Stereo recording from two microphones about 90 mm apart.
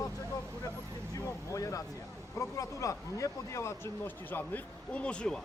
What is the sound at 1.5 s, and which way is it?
Speech, 35° left (ahead or behind).